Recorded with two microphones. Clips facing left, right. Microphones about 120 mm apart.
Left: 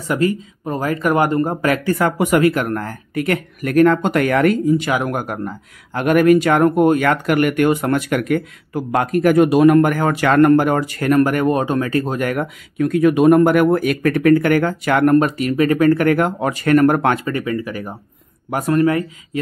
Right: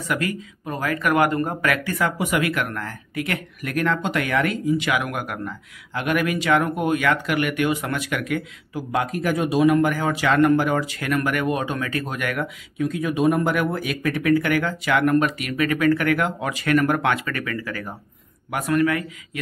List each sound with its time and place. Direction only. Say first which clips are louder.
0.1 s speech: left 8 dB; 30° left (ahead or behind); by 2.4 s 50° left (ahead or behind)
2.4 s speech: left 8 dB; 35° left (ahead or behind)
12.7 s speech: left 9 dB; 60° left (ahead or behind); by 17.3 s 40° left (ahead or behind)
17.3 s speech: left 7 dB; 25° left (ahead or behind)
18.5 s speech: left 5 dB; 35° left (ahead or behind)